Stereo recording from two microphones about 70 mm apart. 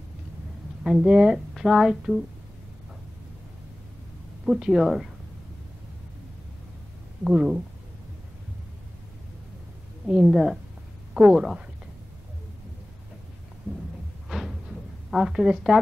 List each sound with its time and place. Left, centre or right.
0.8 s speech: centre
4.5 s a woman's voice: centre
7.2 s speech: centre
10.0 s a woman's voice: centre
10.3 s a woman's voice: centre
14.3 s a sound: centre
15.0 s a woman's voice: centre